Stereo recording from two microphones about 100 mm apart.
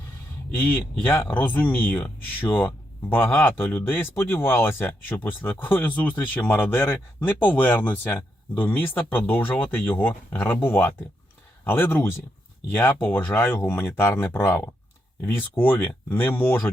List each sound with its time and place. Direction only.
0.5 s a man's voice: 10° left (ahead or behind)